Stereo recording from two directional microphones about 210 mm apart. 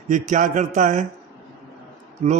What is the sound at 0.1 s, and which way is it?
Speech, 35° right (ahead or behind).